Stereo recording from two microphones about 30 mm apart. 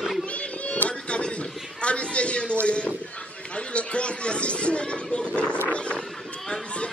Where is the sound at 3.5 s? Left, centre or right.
Left.